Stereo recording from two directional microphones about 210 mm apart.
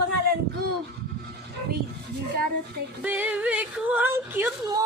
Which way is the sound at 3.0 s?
10° right (ahead or behind).